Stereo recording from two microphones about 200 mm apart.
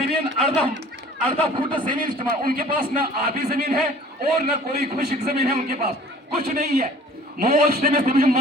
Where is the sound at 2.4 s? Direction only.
45° right (ahead or behind).